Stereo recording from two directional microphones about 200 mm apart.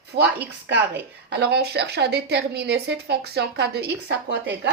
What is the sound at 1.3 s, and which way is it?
Speech, 55° right (ahead or behind).